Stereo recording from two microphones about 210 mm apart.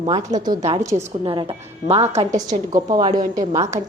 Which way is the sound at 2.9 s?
20° right (ahead or behind).